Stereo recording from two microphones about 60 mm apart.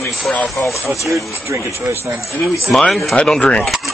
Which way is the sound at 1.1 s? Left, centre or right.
Right.